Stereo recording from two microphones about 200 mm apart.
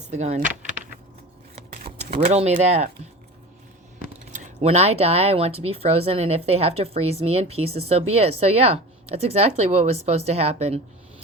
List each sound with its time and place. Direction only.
0.1 s a sound: 35° right (ahead or behind)
2.3 s speech: 35° right (ahead or behind)
4.3 s speech: 40° right (ahead or behind)